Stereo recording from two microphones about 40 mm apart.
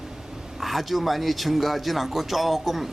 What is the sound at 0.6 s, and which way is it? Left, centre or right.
Speech, centre.